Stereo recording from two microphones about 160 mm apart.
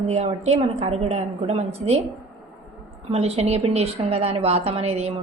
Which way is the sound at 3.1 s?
40° right (ahead or behind).